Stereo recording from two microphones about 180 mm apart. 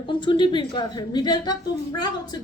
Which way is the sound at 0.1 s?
25° left (ahead or behind).